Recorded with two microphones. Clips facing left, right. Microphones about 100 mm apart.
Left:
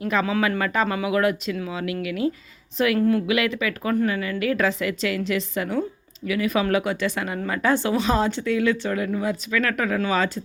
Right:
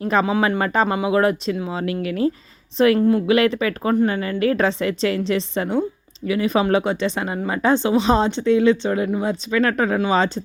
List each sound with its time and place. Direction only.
0.0 s a woman's voice: 35° right (ahead or behind)